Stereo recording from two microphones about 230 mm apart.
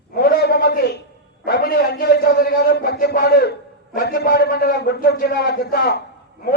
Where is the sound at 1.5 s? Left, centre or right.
Left.